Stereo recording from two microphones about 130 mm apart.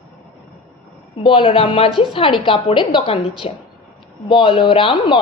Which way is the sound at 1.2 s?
40° left (ahead or behind).